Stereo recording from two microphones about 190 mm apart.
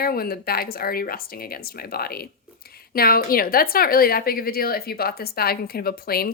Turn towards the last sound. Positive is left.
turn(degrees=55)  # may be behind; listen again after turning